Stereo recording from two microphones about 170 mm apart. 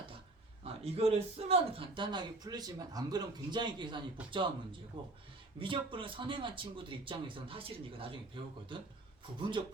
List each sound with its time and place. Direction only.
0.6 s speech: 35° right (ahead or behind)
9.6 s speech: 30° right (ahead or behind)